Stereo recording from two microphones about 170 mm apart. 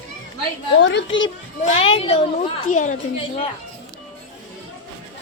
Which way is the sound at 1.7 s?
35° left (ahead or behind).